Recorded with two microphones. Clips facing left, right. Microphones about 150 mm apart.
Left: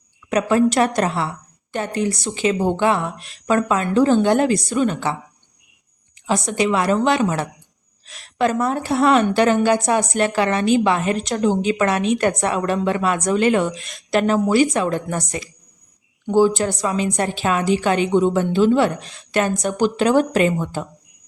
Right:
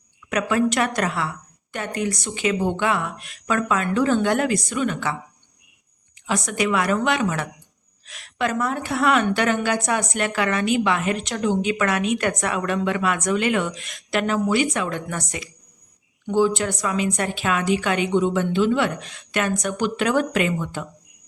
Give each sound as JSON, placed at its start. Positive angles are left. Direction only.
{"t": 0.3, "sound": "a woman's voice", "side_deg": 30}
{"t": 6.2, "sound": "a woman's voice", "side_deg": 30}